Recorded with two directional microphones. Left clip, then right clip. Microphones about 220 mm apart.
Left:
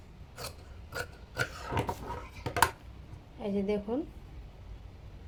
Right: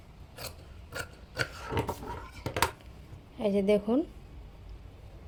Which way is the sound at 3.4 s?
50° right (ahead or behind).